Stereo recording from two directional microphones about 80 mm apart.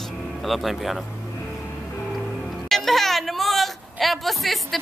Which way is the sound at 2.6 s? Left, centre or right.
Centre.